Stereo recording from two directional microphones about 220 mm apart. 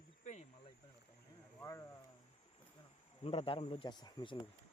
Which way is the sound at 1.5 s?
15° left (ahead or behind).